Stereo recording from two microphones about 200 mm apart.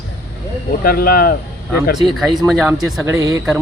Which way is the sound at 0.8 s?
50° left (ahead or behind).